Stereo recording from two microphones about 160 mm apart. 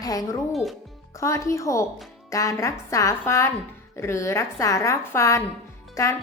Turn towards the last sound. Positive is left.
turn(degrees=20)  # may be behind; listen again after turning